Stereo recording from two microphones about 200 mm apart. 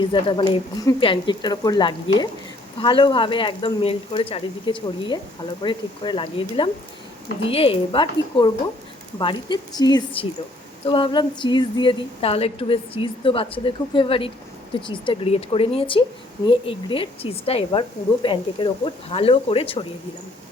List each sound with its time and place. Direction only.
0.0 s speech: 25° left (ahead or behind)